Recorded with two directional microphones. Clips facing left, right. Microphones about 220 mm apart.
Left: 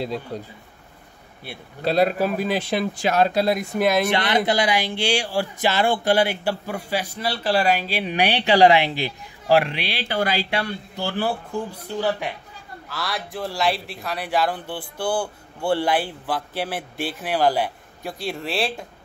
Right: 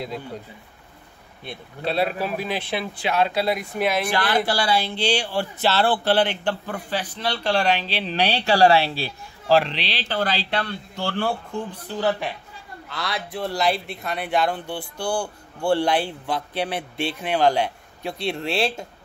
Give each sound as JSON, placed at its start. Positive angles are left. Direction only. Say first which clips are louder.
{"t": 0.3, "sound": "speech", "louder": "left 4 dB", "side_deg": 35}
{"t": 1.9, "sound": "speech", "louder": "left 4 dB", "side_deg": 40}
{"t": 4.1, "sound": "a man's voice", "louder": "left 2 dB", "side_deg": 20}